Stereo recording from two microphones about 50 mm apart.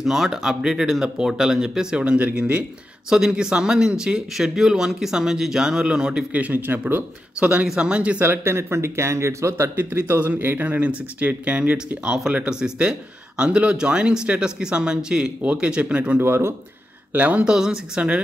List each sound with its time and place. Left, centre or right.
0.0 s speech: centre; by 2.3 s right
3.1 s speech: centre
6.3 s speech: right
7.6 s speech: centre
8.3 s speech: right
9.8 s speech: right
10.6 s speech: right
16.2 s speech: right
17.1 s speech: right
17.5 s speech: centre